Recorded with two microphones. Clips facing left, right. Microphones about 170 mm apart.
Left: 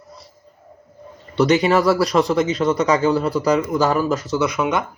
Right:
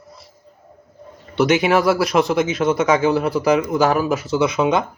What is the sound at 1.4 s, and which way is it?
Speech, centre (ahead or behind).